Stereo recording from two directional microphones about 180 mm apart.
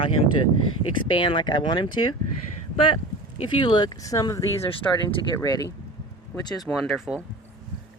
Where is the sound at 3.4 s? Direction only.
25° left (ahead or behind).